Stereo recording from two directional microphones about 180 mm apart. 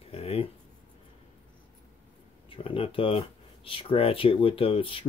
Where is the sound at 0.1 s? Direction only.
35° left (ahead or behind).